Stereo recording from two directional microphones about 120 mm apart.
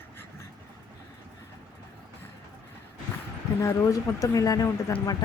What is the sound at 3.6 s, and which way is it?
Speech, 25° left (ahead or behind).